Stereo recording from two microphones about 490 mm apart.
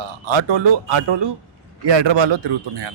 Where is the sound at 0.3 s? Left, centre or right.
Right.